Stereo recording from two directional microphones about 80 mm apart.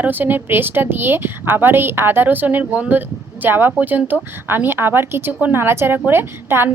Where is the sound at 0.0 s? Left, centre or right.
Right.